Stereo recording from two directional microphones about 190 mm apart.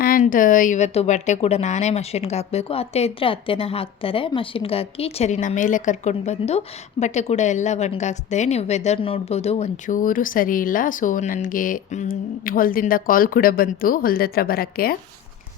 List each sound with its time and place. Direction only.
0.0 s a woman's voice: 45° left (ahead or behind)